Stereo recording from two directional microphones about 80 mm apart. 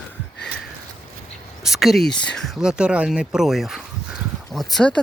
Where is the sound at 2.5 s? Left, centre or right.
Centre.